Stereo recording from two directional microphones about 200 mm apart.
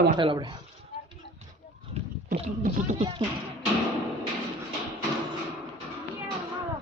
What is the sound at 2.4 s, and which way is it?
Speech, 35° right (ahead or behind).